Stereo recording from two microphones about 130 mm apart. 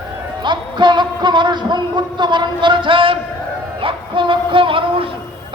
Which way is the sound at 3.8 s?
40° right (ahead or behind).